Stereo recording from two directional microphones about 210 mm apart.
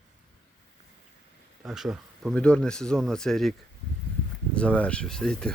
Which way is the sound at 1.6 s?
Centre (ahead or behind).